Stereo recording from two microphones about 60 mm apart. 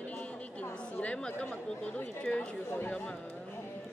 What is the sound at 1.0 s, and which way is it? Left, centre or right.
Chatter, centre.